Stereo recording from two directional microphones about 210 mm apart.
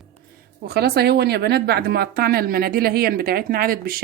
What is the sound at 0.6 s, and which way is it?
A woman's voice, 50° right (ahead or behind).